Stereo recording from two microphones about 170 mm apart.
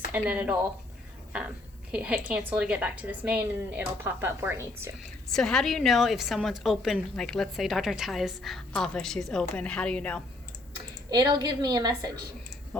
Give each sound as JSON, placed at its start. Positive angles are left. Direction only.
{"t": 0.1, "sound": "a woman's voice", "side_deg": -10}
{"t": 1.9, "sound": "a woman's voice", "side_deg": -5}
{"t": 5.3, "sound": "a woman's voice", "side_deg": 5}
{"t": 11.1, "sound": "a woman's voice", "side_deg": -25}
{"t": 12.7, "sound": "tick-tock", "side_deg": 5}